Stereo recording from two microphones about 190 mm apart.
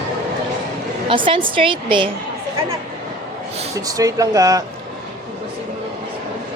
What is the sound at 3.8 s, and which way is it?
Speech, 20° right (ahead or behind).